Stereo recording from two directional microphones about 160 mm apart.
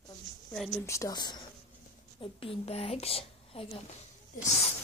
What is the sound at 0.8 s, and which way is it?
A woman's voice, 20° left (ahead or behind).